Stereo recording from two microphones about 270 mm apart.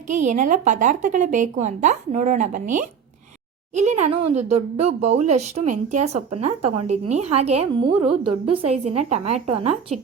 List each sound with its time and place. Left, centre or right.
0.1 s speech: right